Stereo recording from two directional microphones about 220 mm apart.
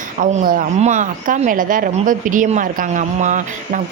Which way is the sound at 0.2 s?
35° right (ahead or behind).